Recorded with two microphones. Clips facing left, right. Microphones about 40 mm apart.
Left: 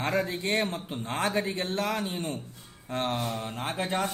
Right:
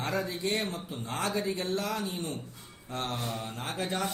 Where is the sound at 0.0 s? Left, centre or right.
Left.